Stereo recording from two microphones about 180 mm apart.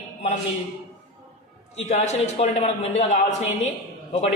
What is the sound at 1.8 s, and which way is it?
A man's voice, 40° left (ahead or behind).